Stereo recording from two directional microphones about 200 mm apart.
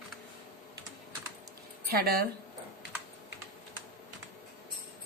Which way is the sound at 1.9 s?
50° right (ahead or behind).